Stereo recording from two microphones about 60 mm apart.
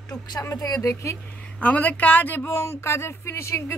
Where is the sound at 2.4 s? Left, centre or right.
Left.